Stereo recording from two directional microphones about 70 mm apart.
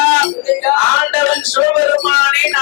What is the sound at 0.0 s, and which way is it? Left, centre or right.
Music, left.